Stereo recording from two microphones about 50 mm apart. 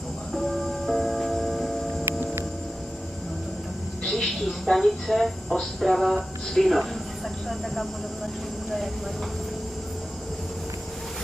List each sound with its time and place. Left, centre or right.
0.3 s music: centre
2.0 s music: right
4.0 s speech: centre